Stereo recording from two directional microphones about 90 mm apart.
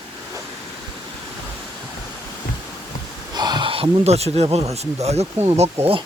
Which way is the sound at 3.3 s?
55° right (ahead or behind).